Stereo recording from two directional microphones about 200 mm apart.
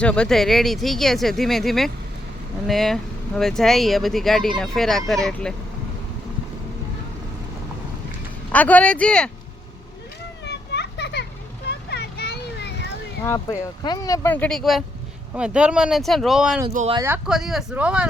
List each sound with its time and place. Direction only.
0.0 s speech: 5° left (ahead or behind)
8.5 s speech: 5° left (ahead or behind)
10.4 s children playing: 55° left (ahead or behind)
11.7 s vehicle: 55° left (ahead or behind)
13.2 s speech: 15° left (ahead or behind); by 16.6 s centre (ahead or behind)
16.9 s speech: 15° right (ahead or behind)
17.2 s speech: centre (ahead or behind)